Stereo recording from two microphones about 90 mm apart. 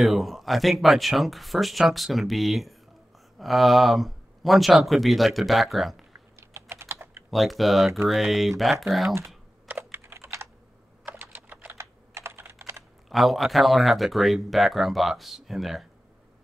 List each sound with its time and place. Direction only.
0.0 s speech: centre (ahead or behind)
6.1 s typing: 30° right (ahead or behind)
7.2 s speech: centre (ahead or behind)
9.7 s computer keyboard: 25° right (ahead or behind)
11.1 s typing: 20° right (ahead or behind)
13.1 s speech: centre (ahead or behind)